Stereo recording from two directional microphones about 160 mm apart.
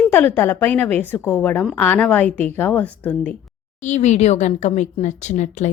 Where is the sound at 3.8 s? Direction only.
45° left (ahead or behind).